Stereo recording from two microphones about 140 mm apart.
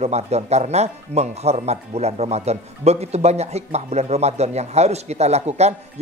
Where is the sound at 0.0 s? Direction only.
50° right (ahead or behind).